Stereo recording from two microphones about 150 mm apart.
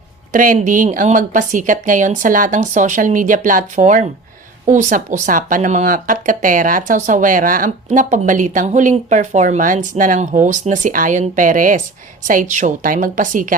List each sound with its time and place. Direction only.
0.3 s speech: 60° right (ahead or behind)